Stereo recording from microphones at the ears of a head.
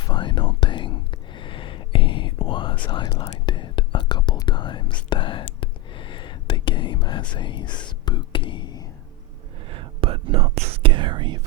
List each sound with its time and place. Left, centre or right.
0.0 s whispering: left
9.6 s whispering: right